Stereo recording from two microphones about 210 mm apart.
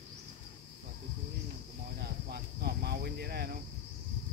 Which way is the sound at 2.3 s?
50° right (ahead or behind).